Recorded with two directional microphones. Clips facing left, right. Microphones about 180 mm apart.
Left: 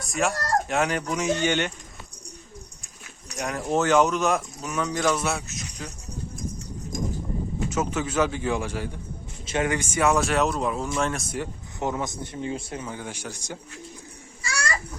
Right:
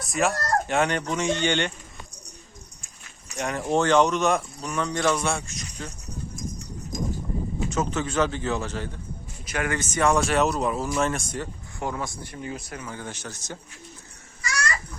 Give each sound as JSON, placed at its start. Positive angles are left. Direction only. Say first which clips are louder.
{"t": 0.0, "sound": "speech", "louder": "right 1 dB", "side_deg": 0}
{"t": 3.2, "sound": "speech", "louder": "right 1 dB", "side_deg": 0}
{"t": 7.7, "sound": "speech", "louder": "even", "side_deg": 10}
{"t": 9.5, "sound": "speech", "louder": "left 3 dB", "side_deg": 25}
{"t": 9.7, "sound": "speech", "louder": "right 2 dB", "side_deg": 10}
{"t": 11.3, "sound": "speech", "louder": "left 2 dB", "side_deg": 20}
{"t": 13.0, "sound": "speech", "louder": "left 1 dB", "side_deg": 10}